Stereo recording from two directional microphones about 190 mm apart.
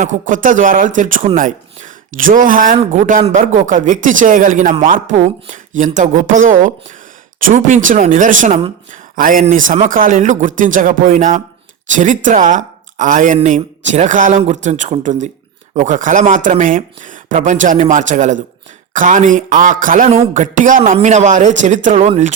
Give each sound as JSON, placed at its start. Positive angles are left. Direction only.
{"t": 0.0, "sound": "speech", "side_deg": -40}